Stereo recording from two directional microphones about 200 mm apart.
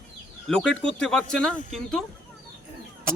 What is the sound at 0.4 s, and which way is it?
Speech, 5° left (ahead or behind).